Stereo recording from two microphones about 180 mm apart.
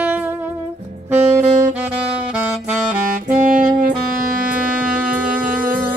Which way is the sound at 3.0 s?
50° right (ahead or behind).